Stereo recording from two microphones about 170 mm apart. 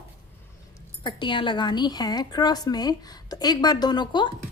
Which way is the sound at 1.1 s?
25° left (ahead or behind).